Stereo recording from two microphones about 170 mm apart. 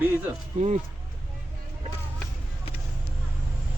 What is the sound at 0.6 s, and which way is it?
Speech, 45° right (ahead or behind).